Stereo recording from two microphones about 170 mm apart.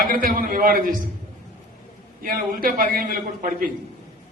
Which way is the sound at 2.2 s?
55° right (ahead or behind).